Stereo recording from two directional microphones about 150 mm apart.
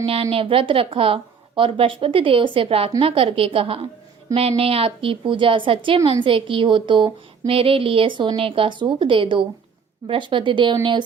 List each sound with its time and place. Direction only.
0.0 s speech: 40° right (ahead or behind)